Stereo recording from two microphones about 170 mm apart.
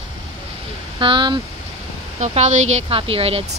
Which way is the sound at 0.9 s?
30° right (ahead or behind).